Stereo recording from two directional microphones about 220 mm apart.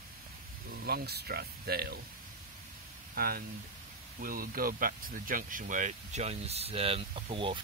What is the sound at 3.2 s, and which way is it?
Speech, 45° right (ahead or behind).